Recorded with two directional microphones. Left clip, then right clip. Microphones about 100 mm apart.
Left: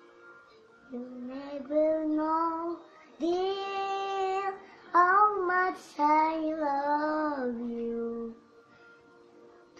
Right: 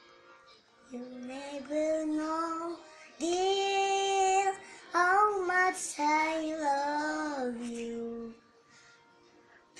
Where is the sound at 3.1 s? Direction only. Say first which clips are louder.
Right 1 dB; 20° left (ahead or behind).